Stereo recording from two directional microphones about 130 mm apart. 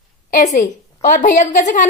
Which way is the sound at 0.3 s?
75° left (ahead or behind).